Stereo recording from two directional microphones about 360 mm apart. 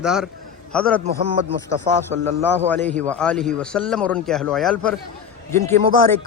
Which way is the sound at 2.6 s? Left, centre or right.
Centre.